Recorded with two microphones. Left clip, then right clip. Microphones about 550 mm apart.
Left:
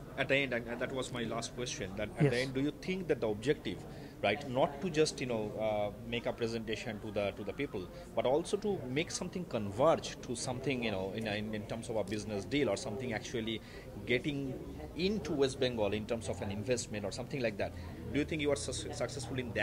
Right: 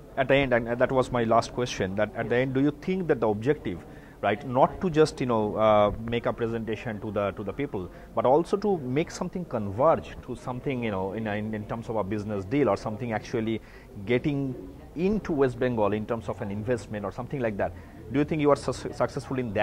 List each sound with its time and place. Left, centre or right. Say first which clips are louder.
0.1 s a man's voice: right 10 dB; right
6.2 s a man's voice: right 7 dB; right
18.1 s a man's voice: right 10 dB; right